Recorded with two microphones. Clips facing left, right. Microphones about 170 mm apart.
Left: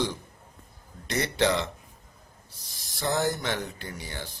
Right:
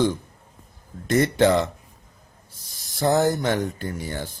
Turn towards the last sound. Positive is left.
turn(degrees=-45)  # may be behind; listen again after turning